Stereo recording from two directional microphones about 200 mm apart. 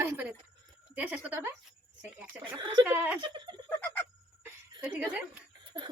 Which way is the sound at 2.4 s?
25° right (ahead or behind).